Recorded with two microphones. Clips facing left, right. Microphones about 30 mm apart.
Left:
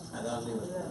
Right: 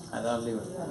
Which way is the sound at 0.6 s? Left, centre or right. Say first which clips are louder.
Even; centre.